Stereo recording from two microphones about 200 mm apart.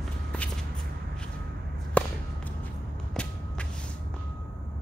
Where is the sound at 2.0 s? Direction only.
5° left (ahead or behind).